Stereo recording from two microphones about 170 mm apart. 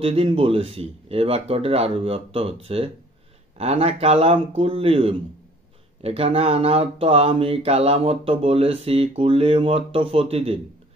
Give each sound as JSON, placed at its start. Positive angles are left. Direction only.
{"t": 0.0, "sound": "speech", "side_deg": -35}